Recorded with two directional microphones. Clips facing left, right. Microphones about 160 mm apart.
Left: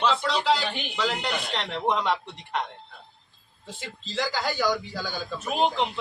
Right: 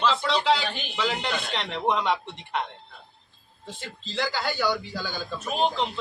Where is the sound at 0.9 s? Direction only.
Centre (ahead or behind).